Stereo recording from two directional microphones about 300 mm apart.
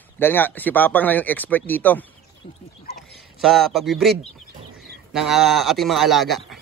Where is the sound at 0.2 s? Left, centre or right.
Centre.